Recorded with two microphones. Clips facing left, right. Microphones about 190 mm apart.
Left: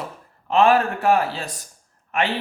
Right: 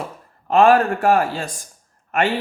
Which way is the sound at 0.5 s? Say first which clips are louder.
Right 3 dB; 50° right (ahead or behind).